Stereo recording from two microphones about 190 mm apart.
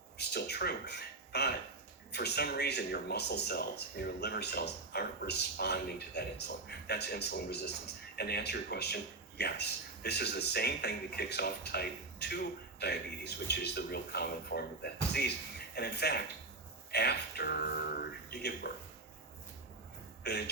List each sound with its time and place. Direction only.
0.2 s a man's voice: 60° left (ahead or behind)
20.2 s a man's voice: 60° left (ahead or behind)